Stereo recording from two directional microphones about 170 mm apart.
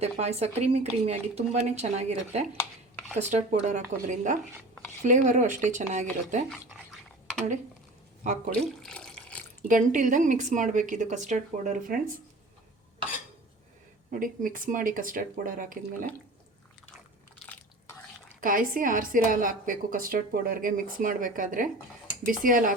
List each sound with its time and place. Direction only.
0.0 s a woman's voice: 40° right (ahead or behind)
6.5 s toothbrush: 5° left (ahead or behind)
8.2 s a woman's voice: 45° right (ahead or behind)
8.6 s water tap: 5° left (ahead or behind)
9.6 s a woman's voice: 50° right (ahead or behind)
14.1 s a woman's voice: 55° right (ahead or behind)
17.4 s biting: 10° left (ahead or behind)
18.3 s a woman's voice: 55° right (ahead or behind)